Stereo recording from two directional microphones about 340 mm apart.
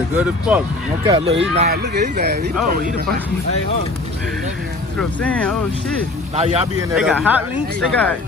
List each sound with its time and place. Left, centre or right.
1.0 s speech: centre
4.9 s speech: centre
6.3 s speech: centre
7.0 s speech: centre